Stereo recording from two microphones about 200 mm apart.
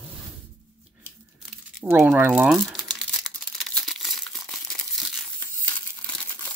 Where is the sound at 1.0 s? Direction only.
10° right (ahead or behind).